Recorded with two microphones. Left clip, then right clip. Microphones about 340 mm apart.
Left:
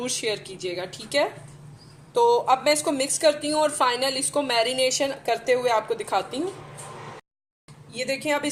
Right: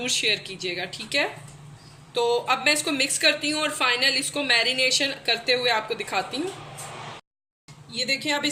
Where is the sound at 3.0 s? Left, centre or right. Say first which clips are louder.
Even; left.